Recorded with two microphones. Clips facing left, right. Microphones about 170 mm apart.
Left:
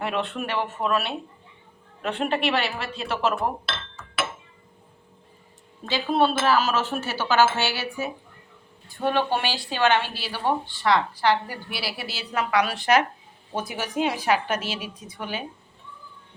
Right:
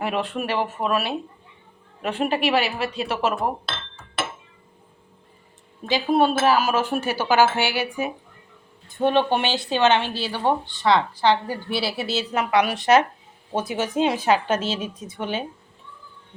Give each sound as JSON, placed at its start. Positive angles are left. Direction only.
{"t": 0.0, "sound": "speech", "side_deg": -10}
{"t": 5.9, "sound": "a woman's voice", "side_deg": -10}